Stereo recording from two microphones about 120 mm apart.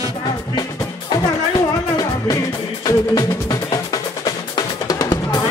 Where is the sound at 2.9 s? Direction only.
30° left (ahead or behind).